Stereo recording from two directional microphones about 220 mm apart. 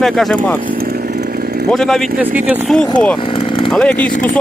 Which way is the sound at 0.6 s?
40° right (ahead or behind).